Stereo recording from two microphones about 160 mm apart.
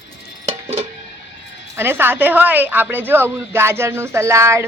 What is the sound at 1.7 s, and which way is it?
A woman's voice, 15° right (ahead or behind).